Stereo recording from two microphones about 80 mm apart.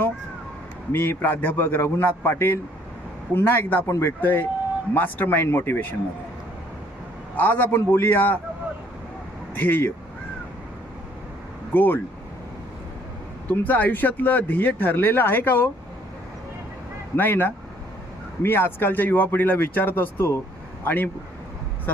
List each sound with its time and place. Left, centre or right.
0.9 s speech: left
3.8 s speech: left
4.2 s speech: left
7.3 s speech: left
9.6 s speech: left
11.7 s speech: left
13.5 s speech: left
17.2 s speech: left